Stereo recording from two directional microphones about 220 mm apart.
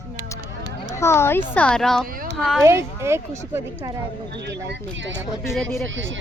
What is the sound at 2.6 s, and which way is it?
A woman's voice, 10° right (ahead or behind).